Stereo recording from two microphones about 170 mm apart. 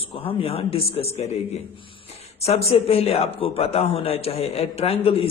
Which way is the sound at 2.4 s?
35° left (ahead or behind).